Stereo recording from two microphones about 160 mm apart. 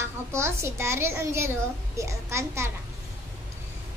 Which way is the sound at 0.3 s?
15° right (ahead or behind).